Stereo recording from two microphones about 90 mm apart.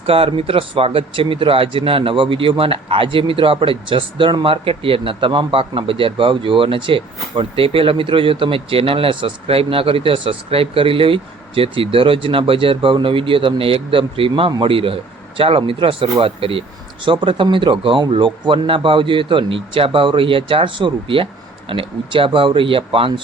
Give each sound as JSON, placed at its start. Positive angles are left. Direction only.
{"t": 0.0, "sound": "speech", "side_deg": -90}
{"t": 4.4, "sound": "speech", "side_deg": -90}